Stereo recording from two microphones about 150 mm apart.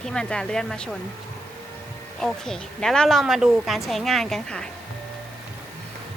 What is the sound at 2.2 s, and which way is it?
A woman's voice, 5° left (ahead or behind).